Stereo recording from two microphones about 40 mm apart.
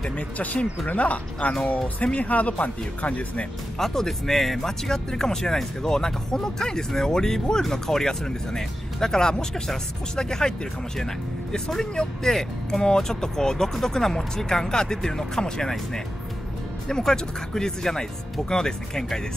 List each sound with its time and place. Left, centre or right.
0.8 s speech: left
3.7 s speech: centre
11.5 s speech: centre
16.8 s speech: centre